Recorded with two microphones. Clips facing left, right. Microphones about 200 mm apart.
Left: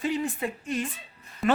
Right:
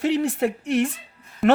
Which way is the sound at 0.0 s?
75° right (ahead or behind).